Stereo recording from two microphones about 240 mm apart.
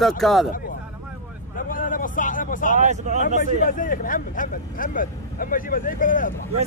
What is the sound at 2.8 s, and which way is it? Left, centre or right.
Speech, right.